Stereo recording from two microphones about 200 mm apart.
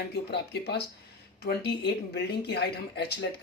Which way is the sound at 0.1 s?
55° left (ahead or behind).